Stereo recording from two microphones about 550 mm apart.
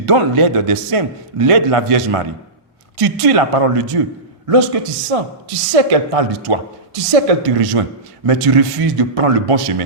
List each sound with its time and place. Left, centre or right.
0.0 s a man's voice: right
4.4 s a man's voice: right